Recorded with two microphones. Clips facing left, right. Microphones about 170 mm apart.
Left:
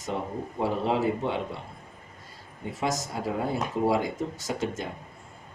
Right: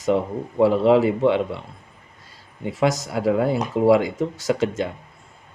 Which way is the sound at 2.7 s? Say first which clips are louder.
Right 8 dB; 75° right (ahead or behind).